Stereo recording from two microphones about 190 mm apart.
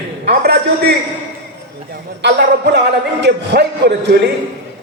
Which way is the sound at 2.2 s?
60° right (ahead or behind).